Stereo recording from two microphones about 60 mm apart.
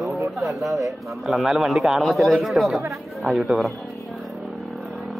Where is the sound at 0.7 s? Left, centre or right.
Right.